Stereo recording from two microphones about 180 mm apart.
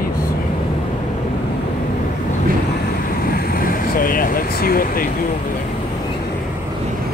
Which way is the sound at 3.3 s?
55° left (ahead or behind).